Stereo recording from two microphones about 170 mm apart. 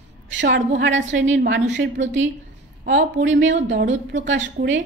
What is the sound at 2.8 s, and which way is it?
A woman's voice, 70° right (ahead or behind).